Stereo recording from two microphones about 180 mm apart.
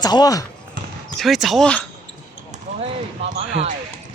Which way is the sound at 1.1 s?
Centre (ahead or behind).